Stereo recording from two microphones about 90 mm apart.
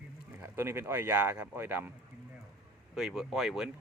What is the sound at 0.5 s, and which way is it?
Speech, 30° right (ahead or behind).